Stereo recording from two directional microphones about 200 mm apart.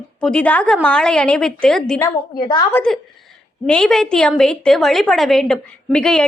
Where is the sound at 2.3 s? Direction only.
20° left (ahead or behind).